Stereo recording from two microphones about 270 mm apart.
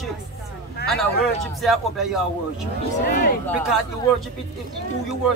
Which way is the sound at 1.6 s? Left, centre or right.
Centre.